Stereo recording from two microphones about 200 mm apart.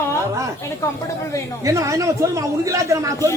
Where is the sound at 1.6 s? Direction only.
15° right (ahead or behind).